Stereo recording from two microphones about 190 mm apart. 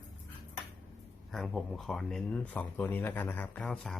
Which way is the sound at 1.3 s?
Centre (ahead or behind).